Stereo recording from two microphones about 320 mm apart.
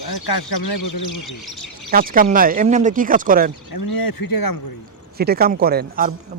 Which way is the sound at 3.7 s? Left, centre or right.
Left.